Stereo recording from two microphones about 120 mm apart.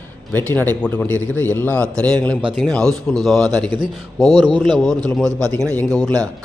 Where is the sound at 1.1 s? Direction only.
25° right (ahead or behind).